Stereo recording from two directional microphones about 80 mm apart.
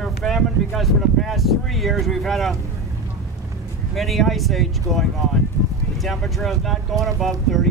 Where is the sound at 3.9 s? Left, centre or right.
Centre.